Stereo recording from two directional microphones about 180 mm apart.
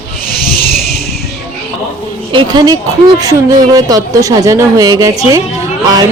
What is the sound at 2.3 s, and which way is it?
A woman's voice, 25° right (ahead or behind).